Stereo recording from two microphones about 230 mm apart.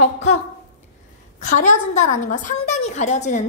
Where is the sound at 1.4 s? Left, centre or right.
Left.